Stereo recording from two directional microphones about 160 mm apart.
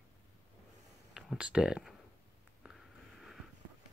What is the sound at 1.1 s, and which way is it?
Speech, 5° right (ahead or behind).